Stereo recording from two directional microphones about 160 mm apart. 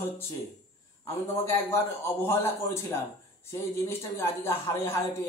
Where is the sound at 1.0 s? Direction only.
15° left (ahead or behind).